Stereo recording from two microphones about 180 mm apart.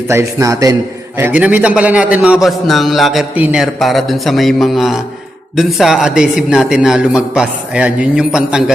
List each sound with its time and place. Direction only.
0.1 s a man's voice: 15° right (ahead or behind)